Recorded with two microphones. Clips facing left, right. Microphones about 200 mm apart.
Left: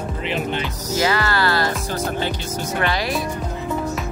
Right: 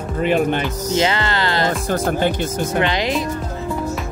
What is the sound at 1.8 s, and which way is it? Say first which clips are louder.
Speech: right 5 dB; 50° right (ahead or behind).